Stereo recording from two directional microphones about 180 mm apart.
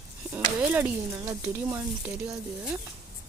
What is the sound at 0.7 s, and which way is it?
Speech, 10° right (ahead or behind).